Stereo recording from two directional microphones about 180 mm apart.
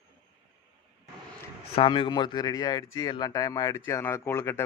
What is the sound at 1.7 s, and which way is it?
Speech, 30° left (ahead or behind).